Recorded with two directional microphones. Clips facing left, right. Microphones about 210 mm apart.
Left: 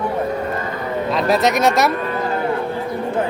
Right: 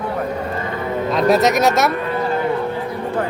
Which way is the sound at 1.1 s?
Centre (ahead or behind).